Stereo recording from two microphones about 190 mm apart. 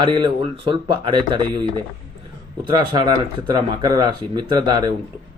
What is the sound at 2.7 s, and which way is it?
Speech, 20° right (ahead or behind).